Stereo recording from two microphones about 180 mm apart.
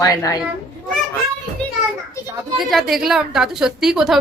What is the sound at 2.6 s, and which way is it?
A woman's voice, centre (ahead or behind).